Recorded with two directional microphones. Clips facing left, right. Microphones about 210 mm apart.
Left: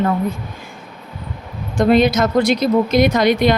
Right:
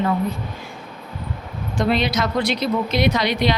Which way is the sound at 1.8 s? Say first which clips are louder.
Left 7 dB; 50° left (ahead or behind).